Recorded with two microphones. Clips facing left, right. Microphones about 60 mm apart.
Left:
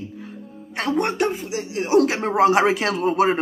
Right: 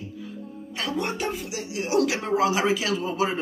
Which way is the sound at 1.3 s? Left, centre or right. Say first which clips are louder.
Left 5 dB; left.